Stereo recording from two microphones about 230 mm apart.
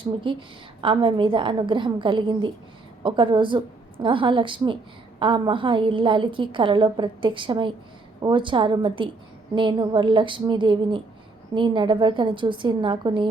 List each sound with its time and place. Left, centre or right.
0.0 s a woman's voice: right